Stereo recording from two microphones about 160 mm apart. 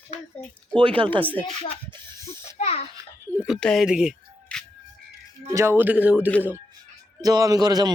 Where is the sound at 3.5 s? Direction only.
5° left (ahead or behind).